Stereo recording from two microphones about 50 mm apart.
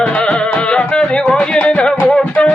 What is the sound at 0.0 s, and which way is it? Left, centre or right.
Music, left.